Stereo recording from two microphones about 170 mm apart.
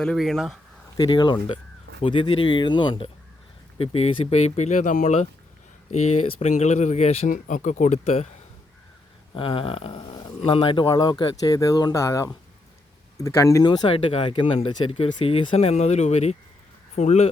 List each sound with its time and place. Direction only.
0.0 s speech: 5° left (ahead or behind)
0.9 s speech: 25° left (ahead or behind); by 8.3 s 40° left (ahead or behind)
9.3 s speech: 30° left (ahead or behind)